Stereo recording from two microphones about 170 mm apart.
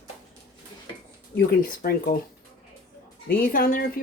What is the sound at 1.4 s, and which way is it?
Speech, 60° left (ahead or behind).